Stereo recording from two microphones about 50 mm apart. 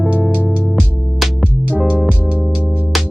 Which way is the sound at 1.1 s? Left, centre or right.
Centre.